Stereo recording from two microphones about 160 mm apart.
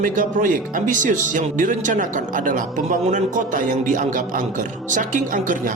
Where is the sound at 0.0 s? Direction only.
55° right (ahead or behind).